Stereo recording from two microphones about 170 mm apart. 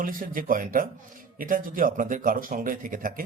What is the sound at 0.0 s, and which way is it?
Speech, 55° right (ahead or behind).